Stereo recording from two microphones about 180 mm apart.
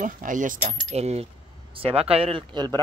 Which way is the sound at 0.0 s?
45° right (ahead or behind).